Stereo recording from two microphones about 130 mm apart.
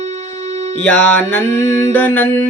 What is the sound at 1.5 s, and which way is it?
Mantra, 65° right (ahead or behind).